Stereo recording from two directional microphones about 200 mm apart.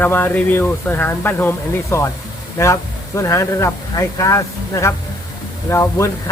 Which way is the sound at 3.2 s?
15° left (ahead or behind).